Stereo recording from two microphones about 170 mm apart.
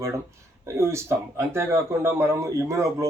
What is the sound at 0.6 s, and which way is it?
Speech, 15° right (ahead or behind).